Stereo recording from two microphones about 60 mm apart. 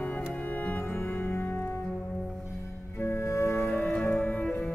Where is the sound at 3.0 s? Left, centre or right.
Left.